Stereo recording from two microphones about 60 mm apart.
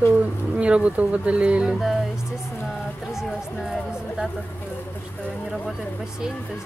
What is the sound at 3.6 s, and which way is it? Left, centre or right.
Speech, centre.